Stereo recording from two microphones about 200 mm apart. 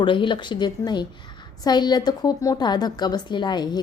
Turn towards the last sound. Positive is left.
turn(degrees=20)  # may be behind; listen again after turning